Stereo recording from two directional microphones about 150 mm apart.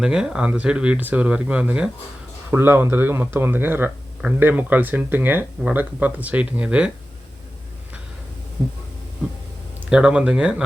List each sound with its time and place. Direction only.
0.0 s speech: 5° right (ahead or behind)
9.9 s speech: 5° right (ahead or behind)